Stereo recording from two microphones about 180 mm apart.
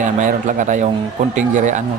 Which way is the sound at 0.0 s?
45° right (ahead or behind).